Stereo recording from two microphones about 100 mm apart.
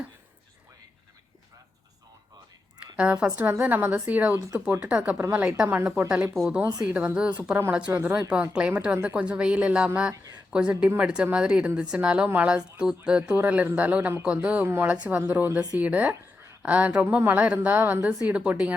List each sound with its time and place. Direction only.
3.0 s speech: 10° right (ahead or behind)
6.3 s speech: centre (ahead or behind)
6.9 s speech: 10° right (ahead or behind)